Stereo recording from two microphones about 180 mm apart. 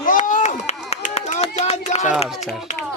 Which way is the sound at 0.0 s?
45° left (ahead or behind).